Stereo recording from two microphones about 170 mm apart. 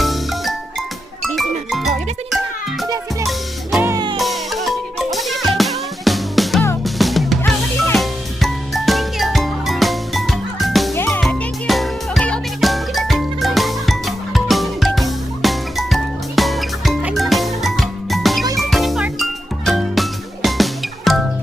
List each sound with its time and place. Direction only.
0.0 s music: centre (ahead or behind)
2.8 s music: 20° right (ahead or behind)
3.2 s music: centre (ahead or behind)
3.8 s music: 25° right (ahead or behind)
4.2 s music: centre (ahead or behind)
10.9 s music: 15° left (ahead or behind)
11.2 s music: centre (ahead or behind)